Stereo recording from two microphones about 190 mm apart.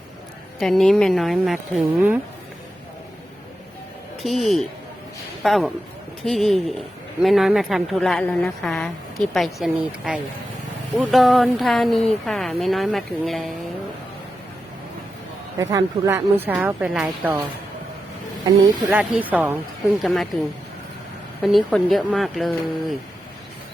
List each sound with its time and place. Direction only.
0.6 s speech: centre (ahead or behind)
4.2 s a man's voice: centre (ahead or behind)
15.5 s speech: 15° right (ahead or behind)
18.9 s speech: 5° right (ahead or behind)
21.4 s speech: centre (ahead or behind)